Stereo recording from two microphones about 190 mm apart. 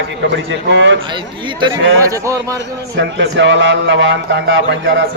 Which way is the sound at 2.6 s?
65° right (ahead or behind).